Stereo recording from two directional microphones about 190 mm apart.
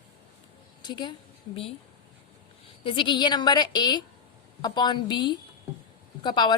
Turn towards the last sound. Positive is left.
turn(degrees=25)  # may be behind; listen again after turning